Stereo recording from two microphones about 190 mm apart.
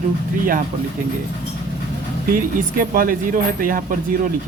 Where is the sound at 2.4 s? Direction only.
45° right (ahead or behind).